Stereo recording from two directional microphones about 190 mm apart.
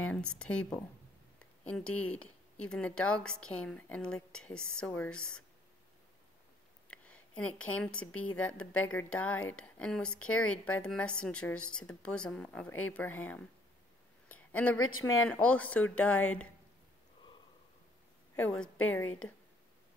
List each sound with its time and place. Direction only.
0.0 s speech: 5° left (ahead or behind)
6.9 s a sound: 5° left (ahead or behind)
7.7 s speech: 5° left (ahead or behind)
8.4 s speech: 90° left
8.8 s speech: 10° left (ahead or behind)
14.3 s a sound: 10° left (ahead or behind)
15.0 s speech: 90° left
15.2 s speech: 5° left (ahead or behind)
18.3 s speech: 5° left (ahead or behind)